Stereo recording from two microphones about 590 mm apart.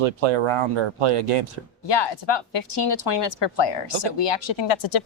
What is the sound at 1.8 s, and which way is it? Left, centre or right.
A woman's voice, left.